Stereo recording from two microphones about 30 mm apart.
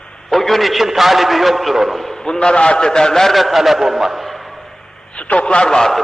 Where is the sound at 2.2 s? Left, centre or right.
Left.